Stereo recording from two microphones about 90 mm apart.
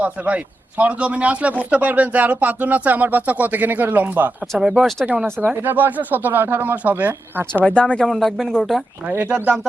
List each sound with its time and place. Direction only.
0.0 s speech: 15° right (ahead or behind)
4.8 s speech: 5° left (ahead or behind)
5.5 s speech: 20° right (ahead or behind)
7.6 s speech: 15° left (ahead or behind)
9.0 s speech: 15° right (ahead or behind)